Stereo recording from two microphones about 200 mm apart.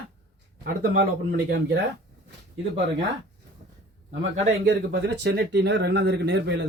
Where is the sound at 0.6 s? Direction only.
50° right (ahead or behind).